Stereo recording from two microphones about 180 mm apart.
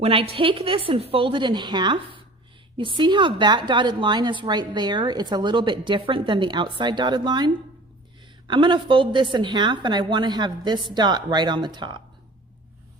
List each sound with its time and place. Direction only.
0.0 s a woman's voice: 30° right (ahead or behind)